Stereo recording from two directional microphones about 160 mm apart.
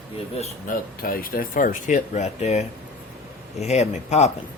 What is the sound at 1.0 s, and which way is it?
Speech, 65° left (ahead or behind).